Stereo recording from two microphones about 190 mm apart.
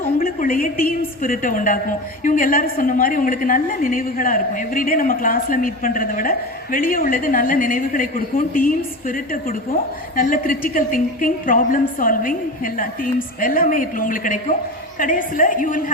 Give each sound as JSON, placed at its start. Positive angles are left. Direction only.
{"t": 0.2, "sound": "a woman's voice", "side_deg": 45}